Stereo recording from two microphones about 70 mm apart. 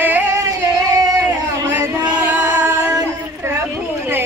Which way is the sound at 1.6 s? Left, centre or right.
Right.